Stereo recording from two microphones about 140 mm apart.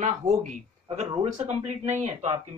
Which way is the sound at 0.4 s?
60° right (ahead or behind).